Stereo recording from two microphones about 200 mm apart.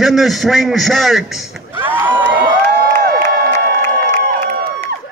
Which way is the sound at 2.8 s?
50° right (ahead or behind).